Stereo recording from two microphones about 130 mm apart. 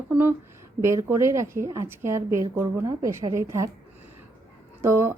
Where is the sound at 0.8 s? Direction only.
20° right (ahead or behind).